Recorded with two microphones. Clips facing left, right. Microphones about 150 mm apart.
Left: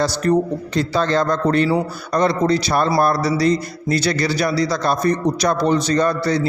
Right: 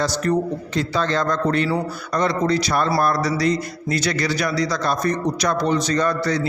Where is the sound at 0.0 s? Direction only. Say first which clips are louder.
Left 3 dB; 35° left (ahead or behind).